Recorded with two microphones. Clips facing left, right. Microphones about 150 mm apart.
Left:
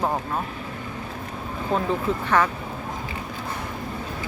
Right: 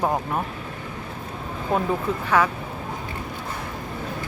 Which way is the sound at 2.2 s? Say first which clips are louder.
Right 1 dB; 10° right (ahead or behind).